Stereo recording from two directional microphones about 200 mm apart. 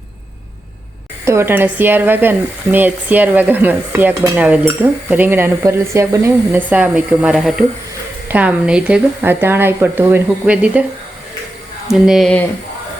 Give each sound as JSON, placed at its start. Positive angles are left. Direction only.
{"t": 1.2, "sound": "stir", "side_deg": -15}
{"t": 11.9, "sound": "speech", "side_deg": 0}